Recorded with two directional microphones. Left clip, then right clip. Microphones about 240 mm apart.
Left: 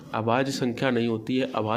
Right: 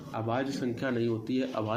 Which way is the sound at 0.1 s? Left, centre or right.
Left.